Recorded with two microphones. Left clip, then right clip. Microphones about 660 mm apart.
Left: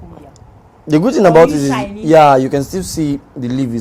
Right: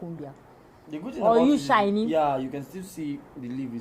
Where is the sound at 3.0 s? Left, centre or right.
Left.